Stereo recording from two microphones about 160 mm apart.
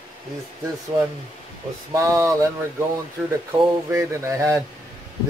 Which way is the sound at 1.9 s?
20° right (ahead or behind).